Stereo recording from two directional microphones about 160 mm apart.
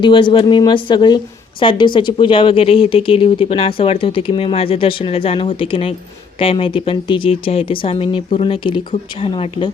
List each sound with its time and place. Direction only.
0.0 s a woman's voice: 30° left (ahead or behind)